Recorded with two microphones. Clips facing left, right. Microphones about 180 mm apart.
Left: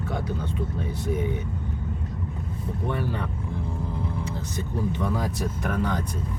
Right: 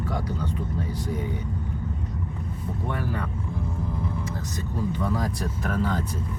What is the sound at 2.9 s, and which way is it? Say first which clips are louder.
Speech: left 1 dB; 25° left (ahead or behind).